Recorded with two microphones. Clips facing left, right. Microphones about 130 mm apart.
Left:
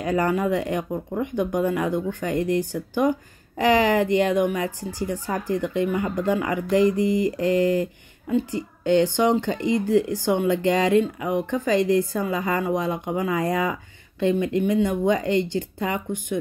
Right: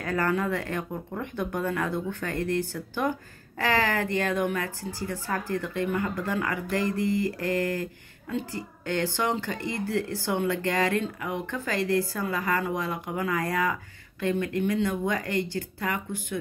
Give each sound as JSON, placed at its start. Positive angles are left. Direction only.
{"t": 0.0, "sound": "speech", "side_deg": 15}